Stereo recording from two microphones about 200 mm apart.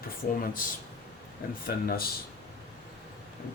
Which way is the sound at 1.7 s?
45° left (ahead or behind).